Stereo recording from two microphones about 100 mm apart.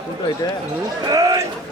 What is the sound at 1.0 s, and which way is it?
Speech, 35° right (ahead or behind).